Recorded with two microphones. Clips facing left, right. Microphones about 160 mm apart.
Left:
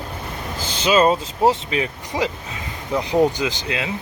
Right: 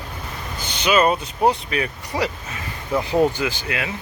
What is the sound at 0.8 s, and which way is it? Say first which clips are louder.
Speech: left 2 dB; 25° left (ahead or behind).